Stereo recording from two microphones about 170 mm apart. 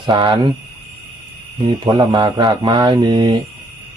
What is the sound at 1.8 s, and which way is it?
Speech, 25° right (ahead or behind).